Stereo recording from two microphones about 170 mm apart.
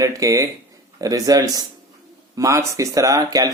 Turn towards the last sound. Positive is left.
turn(degrees=-20)  # may be behind; listen again after turning